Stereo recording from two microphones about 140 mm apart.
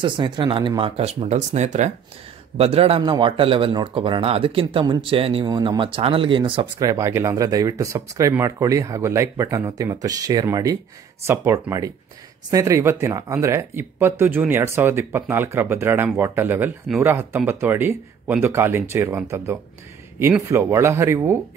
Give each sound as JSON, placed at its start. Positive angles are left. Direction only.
{"t": 0.0, "sound": "speech", "side_deg": -35}
{"t": 2.5, "sound": "a man's voice", "side_deg": -45}
{"t": 3.0, "sound": "speech", "side_deg": -35}